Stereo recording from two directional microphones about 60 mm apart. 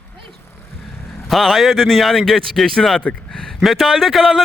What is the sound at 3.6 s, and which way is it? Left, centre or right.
Speech, centre.